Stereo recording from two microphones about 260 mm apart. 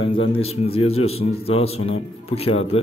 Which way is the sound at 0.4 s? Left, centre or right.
Left.